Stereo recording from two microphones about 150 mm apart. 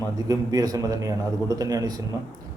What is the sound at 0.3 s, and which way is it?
A man's voice, 25° right (ahead or behind).